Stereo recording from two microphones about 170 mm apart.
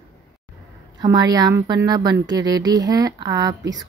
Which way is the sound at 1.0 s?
20° right (ahead or behind).